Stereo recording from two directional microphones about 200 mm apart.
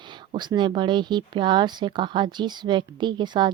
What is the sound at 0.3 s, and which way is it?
Speech, 20° right (ahead or behind).